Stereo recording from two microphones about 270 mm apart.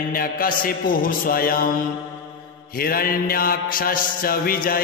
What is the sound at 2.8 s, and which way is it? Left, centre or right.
Mantra, left.